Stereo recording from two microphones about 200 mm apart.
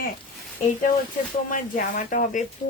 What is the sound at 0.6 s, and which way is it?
Speech, 40° left (ahead or behind).